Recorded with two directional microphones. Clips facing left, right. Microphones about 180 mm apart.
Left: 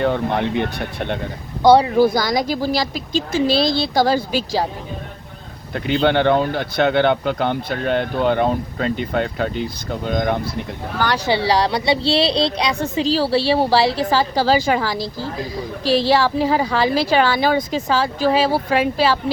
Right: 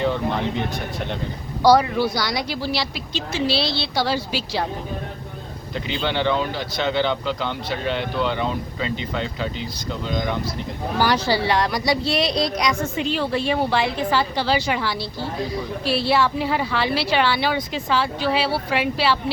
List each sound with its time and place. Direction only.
0.0 s speech: 60° left (ahead or behind)
1.6 s a woman's voice: 25° left (ahead or behind)
2.0 s speech: 45° left (ahead or behind)
5.7 s speech: 55° left (ahead or behind)
10.9 s speech: 5° right (ahead or behind)
11.3 s speech: 30° left (ahead or behind)
14.8 s a woman's voice: 90° left
16.2 s speech: 40° left (ahead or behind)